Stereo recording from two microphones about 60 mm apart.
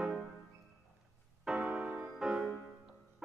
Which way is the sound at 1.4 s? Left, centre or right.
Centre.